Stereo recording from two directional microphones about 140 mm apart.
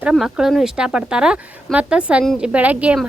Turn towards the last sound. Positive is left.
turn(degrees=-10)  # may be behind; listen again after turning